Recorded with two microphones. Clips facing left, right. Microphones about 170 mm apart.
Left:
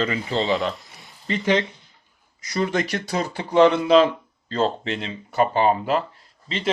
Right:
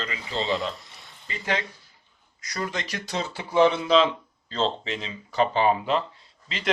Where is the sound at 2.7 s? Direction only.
65° left (ahead or behind).